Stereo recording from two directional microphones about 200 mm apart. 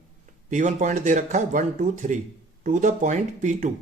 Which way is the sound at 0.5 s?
35° right (ahead or behind).